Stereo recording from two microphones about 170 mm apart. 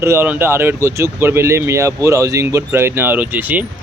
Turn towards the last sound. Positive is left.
turn(degrees=-10)  # may be behind; listen again after turning